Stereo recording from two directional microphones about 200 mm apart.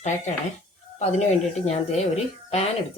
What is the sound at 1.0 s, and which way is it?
Speech, 35° left (ahead or behind).